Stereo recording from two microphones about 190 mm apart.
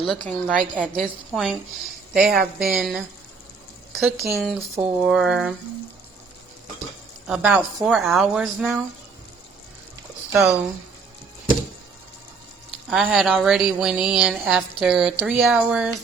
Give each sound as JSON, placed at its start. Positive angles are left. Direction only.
{"t": 0.0, "sound": "speech", "side_deg": 5}
{"t": 2.2, "sound": "speech", "side_deg": -50}
{"t": 2.6, "sound": "speech", "side_deg": 0}
{"t": 7.3, "sound": "speech", "side_deg": -5}
{"t": 12.9, "sound": "speech", "side_deg": 0}